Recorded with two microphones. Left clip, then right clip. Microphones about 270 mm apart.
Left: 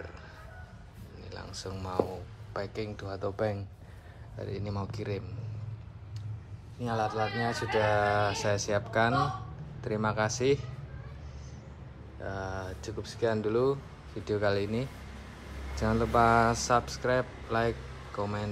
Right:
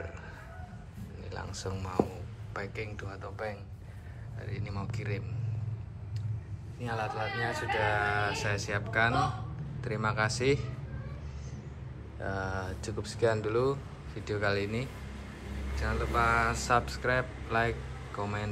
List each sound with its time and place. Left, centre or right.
1.3 s speech: centre
6.8 s speech: centre
12.2 s speech: centre